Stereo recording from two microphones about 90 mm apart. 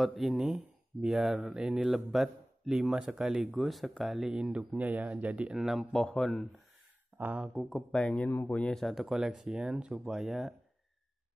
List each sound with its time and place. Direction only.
0.0 s speech: centre (ahead or behind)
5.6 s speech: centre (ahead or behind)
7.2 s speech: 15° right (ahead or behind)
7.5 s speech: 5° left (ahead or behind)
8.7 s speech: centre (ahead or behind)